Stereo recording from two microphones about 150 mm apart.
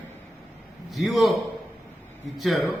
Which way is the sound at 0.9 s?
Centre (ahead or behind).